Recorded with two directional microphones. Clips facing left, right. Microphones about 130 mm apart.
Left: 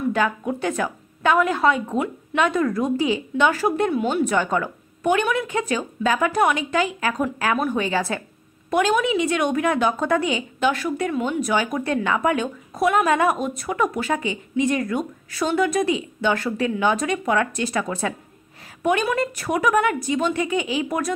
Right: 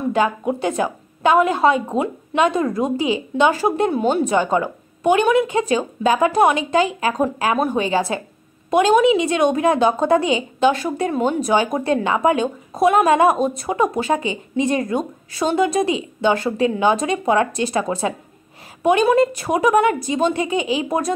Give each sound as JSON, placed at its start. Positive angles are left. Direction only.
{"t": 0.0, "sound": "a woman's voice", "side_deg": -25}